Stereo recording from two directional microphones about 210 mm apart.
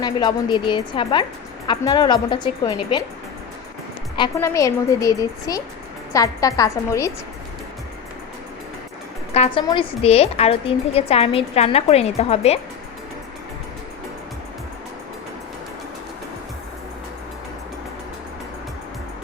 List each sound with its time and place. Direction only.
0.0 s a woman's voice: 20° left (ahead or behind)
4.2 s a woman's voice: 15° left (ahead or behind)
9.3 s a woman's voice: 30° left (ahead or behind)